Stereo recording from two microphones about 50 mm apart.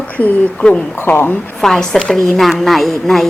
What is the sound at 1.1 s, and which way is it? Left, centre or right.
Speech, left.